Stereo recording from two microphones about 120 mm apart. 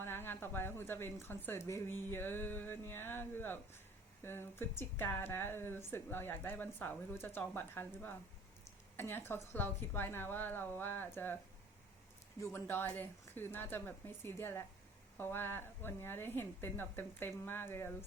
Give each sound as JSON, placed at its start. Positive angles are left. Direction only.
{"t": 0.0, "sound": "a woman's voice", "side_deg": 20}
{"t": 12.4, "sound": "a woman's voice", "side_deg": 20}